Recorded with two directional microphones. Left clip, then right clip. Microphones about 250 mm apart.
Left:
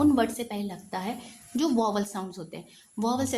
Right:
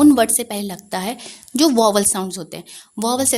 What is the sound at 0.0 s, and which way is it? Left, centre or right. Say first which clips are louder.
A woman's voice: right 10 dB; right.